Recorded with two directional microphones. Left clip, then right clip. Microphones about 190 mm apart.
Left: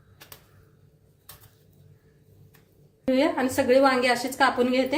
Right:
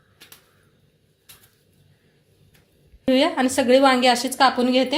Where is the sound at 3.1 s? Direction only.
30° right (ahead or behind).